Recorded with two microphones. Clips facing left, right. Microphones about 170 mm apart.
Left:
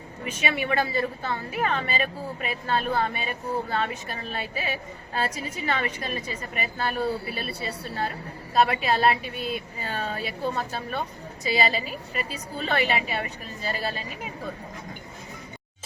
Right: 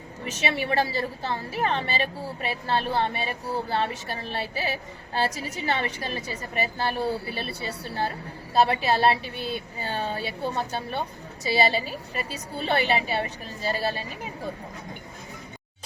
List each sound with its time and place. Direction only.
0.3 s a woman's voice: 35° right (ahead or behind)
8.5 s a woman's voice: 30° right (ahead or behind)